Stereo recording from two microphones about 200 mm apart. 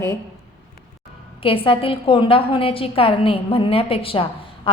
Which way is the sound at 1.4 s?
25° left (ahead or behind).